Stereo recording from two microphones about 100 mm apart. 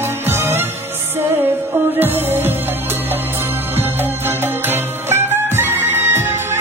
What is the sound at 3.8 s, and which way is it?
Music, 20° right (ahead or behind).